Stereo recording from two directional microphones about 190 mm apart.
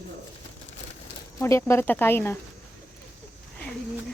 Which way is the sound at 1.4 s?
15° left (ahead or behind).